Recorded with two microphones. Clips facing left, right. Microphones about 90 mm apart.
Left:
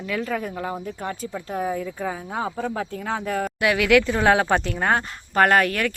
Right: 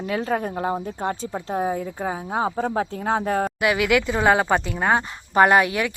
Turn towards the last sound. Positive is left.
turn(degrees=-10)  # may be behind; listen again after turning